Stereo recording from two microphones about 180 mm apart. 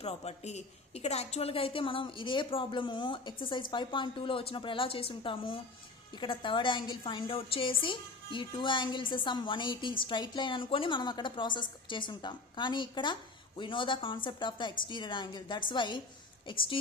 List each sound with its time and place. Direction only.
0.0 s a woman's voice: 35° left (ahead or behind)